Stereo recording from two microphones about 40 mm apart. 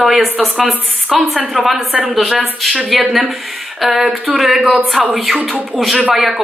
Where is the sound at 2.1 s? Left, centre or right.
Centre.